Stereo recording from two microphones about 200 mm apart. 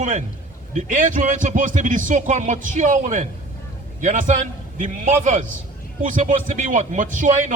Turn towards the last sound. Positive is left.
turn(degrees=-40)  # may be behind; listen again after turning